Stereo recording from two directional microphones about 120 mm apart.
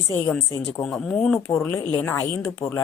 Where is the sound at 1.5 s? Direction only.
20° left (ahead or behind).